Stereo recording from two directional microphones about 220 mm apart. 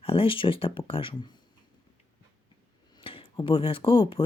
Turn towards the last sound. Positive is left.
turn(degrees=25)  # may be behind; listen again after turning